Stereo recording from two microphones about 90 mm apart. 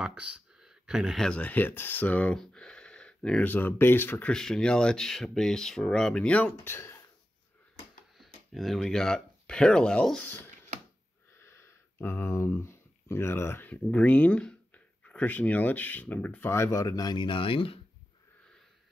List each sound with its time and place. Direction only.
0.0 s clicking: 10° right (ahead or behind)
1.2 s speech: 15° left (ahead or behind)
2.4 s a sound: 10° left (ahead or behind)
3.4 s speech: 25° left (ahead or behind)
4.3 s speech: 5° left (ahead or behind)
6.7 s speech: 30° left (ahead or behind)
8.2 s speech: centre (ahead or behind)
10.2 s speech: 25° left (ahead or behind); by 17.7 s 85° left